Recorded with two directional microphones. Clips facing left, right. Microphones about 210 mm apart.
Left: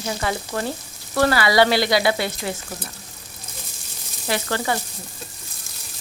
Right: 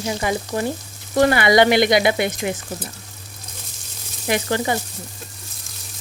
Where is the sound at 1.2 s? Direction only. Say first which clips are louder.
Right 3 dB; 20° right (ahead or behind).